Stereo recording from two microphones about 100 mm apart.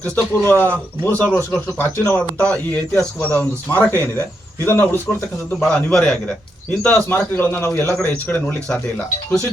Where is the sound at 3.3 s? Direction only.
20° left (ahead or behind).